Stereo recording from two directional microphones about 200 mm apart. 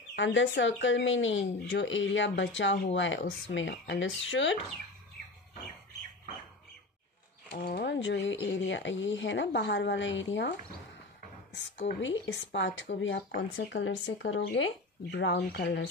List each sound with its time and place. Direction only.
0.1 s speech: 70° left (ahead or behind)
7.5 s speech: 55° left (ahead or behind)
11.5 s speech: 65° left (ahead or behind)